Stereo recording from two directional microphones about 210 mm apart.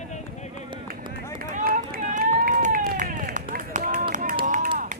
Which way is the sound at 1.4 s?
40° right (ahead or behind).